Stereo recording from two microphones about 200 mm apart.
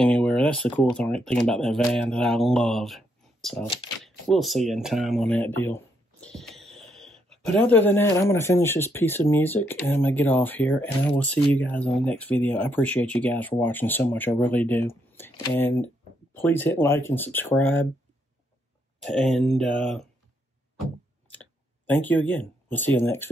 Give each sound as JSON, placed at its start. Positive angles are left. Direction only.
{"t": 0.0, "sound": "speech", "side_deg": 5}
{"t": 3.6, "sound": "speech", "side_deg": 30}
{"t": 4.0, "sound": "speech", "side_deg": 0}
{"t": 19.0, "sound": "speech", "side_deg": 0}
{"t": 21.3, "sound": "a sound", "side_deg": 10}